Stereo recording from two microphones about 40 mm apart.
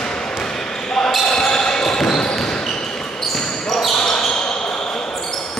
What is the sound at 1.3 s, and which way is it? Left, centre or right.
Basketball bounce, centre.